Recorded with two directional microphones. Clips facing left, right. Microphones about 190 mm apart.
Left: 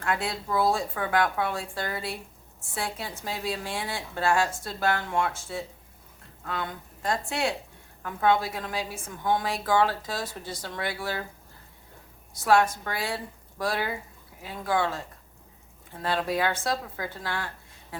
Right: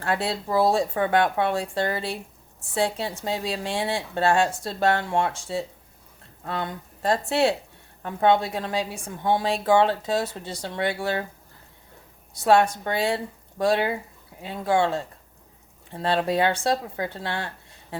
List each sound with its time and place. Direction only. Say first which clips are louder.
0.0 s a woman's voice: right 3 dB; 30° right (ahead or behind)
6.4 s a woman's voice: right 3 dB; 30° right (ahead or behind)
12.8 s a woman's voice: right 7 dB; 25° right (ahead or behind)